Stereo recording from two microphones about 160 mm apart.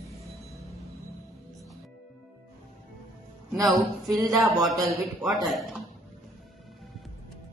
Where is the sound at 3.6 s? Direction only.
Centre (ahead or behind).